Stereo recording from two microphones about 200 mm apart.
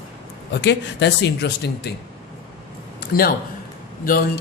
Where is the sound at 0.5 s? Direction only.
60° left (ahead or behind).